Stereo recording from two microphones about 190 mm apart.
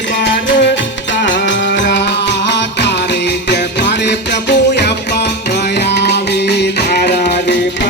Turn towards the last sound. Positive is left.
turn(degrees=65)  # may be behind; listen again after turning